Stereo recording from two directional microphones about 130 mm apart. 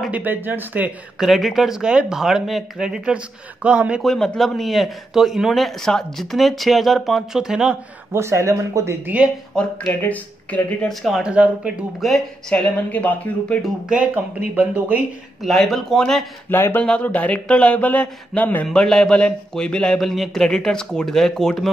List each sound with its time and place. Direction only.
0.0 s speech: 10° right (ahead or behind)
4.1 s speech: 5° left (ahead or behind)
8.1 s speech: 20° right (ahead or behind)
9.6 s a man's voice: 10° left (ahead or behind)
10.9 s speech: centre (ahead or behind)
13.6 s speech: 10° right (ahead or behind)
15.4 s speech: centre (ahead or behind)
16.4 s a man's voice: 15° left (ahead or behind)